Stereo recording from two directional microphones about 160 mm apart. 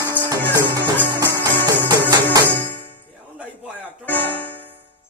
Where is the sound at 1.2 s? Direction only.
25° right (ahead or behind).